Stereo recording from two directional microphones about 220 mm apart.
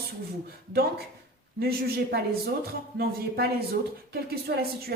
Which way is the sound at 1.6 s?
45° right (ahead or behind).